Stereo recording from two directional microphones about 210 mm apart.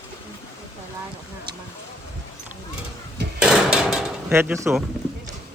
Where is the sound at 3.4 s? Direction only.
5° right (ahead or behind).